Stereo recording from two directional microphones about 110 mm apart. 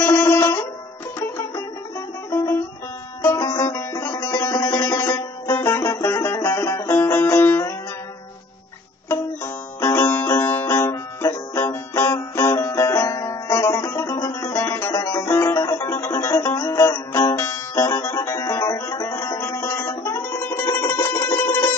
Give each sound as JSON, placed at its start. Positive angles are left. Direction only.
{"t": 0.0, "sound": "music", "side_deg": 25}
{"t": 2.3, "sound": "music", "side_deg": 25}
{"t": 9.1, "sound": "music", "side_deg": 25}